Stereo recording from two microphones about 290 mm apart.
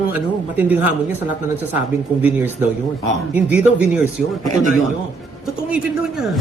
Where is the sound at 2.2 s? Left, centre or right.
Centre.